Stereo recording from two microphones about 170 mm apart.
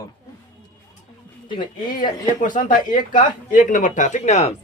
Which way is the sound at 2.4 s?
50° left (ahead or behind).